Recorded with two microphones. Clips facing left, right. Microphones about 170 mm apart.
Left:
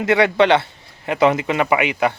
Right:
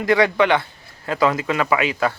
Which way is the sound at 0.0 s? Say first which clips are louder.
Left 2 dB; 25° left (ahead or behind).